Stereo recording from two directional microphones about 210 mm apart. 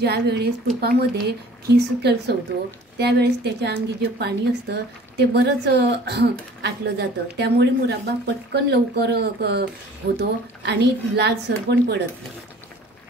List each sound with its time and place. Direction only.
0.0 s a woman's voice: 50° right (ahead or behind)